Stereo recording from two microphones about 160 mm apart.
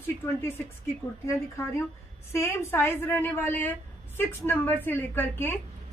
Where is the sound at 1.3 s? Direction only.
15° left (ahead or behind).